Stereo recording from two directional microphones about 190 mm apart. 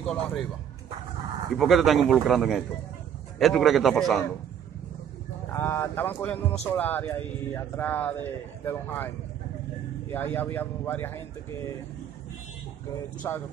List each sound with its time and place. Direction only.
0.0 s a man's voice: 5° left (ahead or behind)
1.6 s a man's voice: centre (ahead or behind)
5.5 s speech: 10° left (ahead or behind)
10.1 s speech: 10° left (ahead or behind)
13.2 s speech: 20° left (ahead or behind)